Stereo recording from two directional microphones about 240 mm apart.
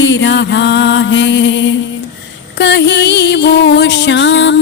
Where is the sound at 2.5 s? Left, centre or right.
Left.